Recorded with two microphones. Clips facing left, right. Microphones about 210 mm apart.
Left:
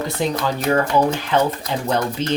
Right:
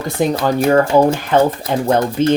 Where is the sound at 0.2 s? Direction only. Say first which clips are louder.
Right 8 dB; 50° right (ahead or behind).